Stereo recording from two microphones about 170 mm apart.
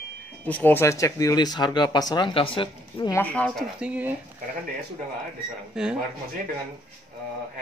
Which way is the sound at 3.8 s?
10° right (ahead or behind).